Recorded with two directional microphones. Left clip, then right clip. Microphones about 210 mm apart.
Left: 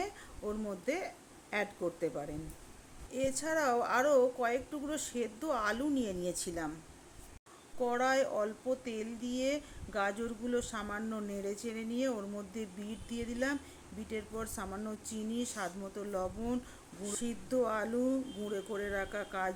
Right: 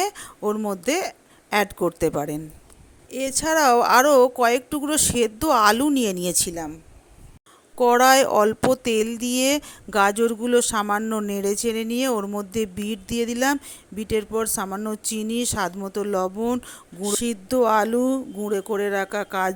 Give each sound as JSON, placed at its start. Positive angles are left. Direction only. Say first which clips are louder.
{"t": 0.0, "sound": "a woman's voice", "louder": "right 15 dB", "side_deg": -45}
{"t": 7.8, "sound": "speech", "louder": "right 16 dB", "side_deg": -50}